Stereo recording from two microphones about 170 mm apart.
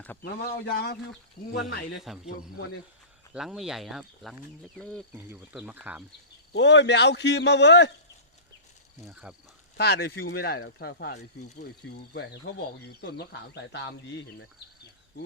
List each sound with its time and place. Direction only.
0.2 s speech: 65° left (ahead or behind)
2.1 s speech: centre (ahead or behind)
3.3 s speech: centre (ahead or behind)
5.1 s speech: 10° right (ahead or behind)
6.5 s speech: 90° left
9.7 s speech: 75° left (ahead or behind)